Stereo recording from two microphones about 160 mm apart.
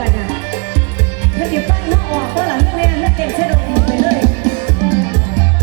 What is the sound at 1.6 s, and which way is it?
Music, 35° left (ahead or behind).